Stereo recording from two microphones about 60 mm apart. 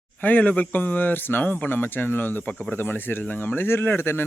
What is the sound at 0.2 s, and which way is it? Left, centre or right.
Speech, left.